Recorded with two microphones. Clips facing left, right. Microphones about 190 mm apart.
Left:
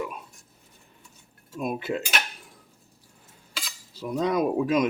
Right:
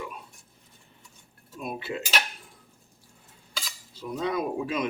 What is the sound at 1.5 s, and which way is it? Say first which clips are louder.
Speech: left 5 dB; 45° left (ahead or behind).